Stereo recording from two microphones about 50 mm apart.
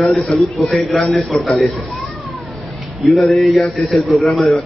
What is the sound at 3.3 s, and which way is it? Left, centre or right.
A man's voice, centre.